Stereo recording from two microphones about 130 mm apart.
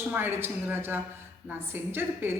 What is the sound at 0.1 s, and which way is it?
Speech, 15° right (ahead or behind).